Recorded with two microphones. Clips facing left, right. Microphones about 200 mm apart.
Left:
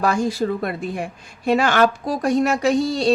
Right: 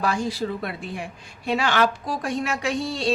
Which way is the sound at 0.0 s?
45° left (ahead or behind).